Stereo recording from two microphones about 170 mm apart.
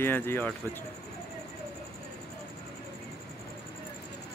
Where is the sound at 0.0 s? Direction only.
15° left (ahead or behind).